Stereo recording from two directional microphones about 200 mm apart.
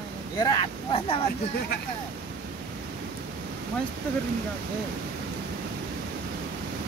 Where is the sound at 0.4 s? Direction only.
20° left (ahead or behind).